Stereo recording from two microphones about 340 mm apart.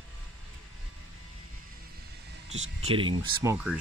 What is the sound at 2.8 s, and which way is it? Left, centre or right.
Speech, centre.